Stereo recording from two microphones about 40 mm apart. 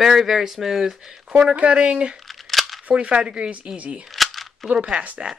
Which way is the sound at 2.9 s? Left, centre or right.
Right.